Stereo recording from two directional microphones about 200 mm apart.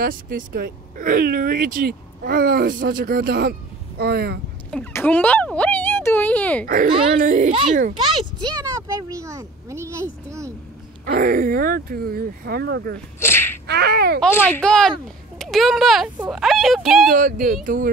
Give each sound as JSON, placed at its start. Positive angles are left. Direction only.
{"t": 0.0, "sound": "speech", "side_deg": -45}
{"t": 4.6, "sound": "a sound", "side_deg": 5}
{"t": 6.6, "sound": "a child's voice", "side_deg": -45}
{"t": 8.0, "sound": "speech", "side_deg": -25}
{"t": 11.1, "sound": "speech", "side_deg": -45}
{"t": 13.2, "sound": "sneeze", "side_deg": 10}
{"t": 13.7, "sound": "speech", "side_deg": -55}
{"t": 14.5, "sound": "speech", "side_deg": 5}
{"t": 17.1, "sound": "speech", "side_deg": -45}